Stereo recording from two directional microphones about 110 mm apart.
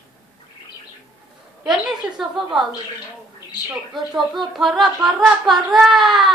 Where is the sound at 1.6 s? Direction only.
5° right (ahead or behind).